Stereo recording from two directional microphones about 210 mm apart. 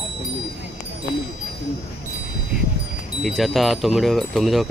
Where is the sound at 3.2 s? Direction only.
Centre (ahead or behind).